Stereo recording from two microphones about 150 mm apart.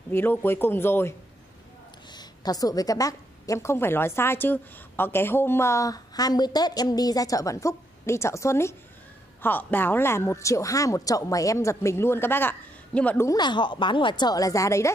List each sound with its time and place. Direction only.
0.1 s speech: 15° left (ahead or behind)
2.0 s a woman's voice: 25° left (ahead or behind); by 13.3 s 10° left (ahead or behind)
13.3 s a woman's voice: 30° left (ahead or behind)